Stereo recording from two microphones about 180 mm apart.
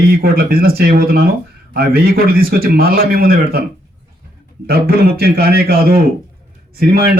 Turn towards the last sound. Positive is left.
turn(degrees=-55)  # may be behind; listen again after turning